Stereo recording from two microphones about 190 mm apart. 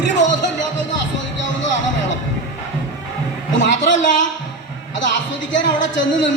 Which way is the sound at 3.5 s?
70° left (ahead or behind).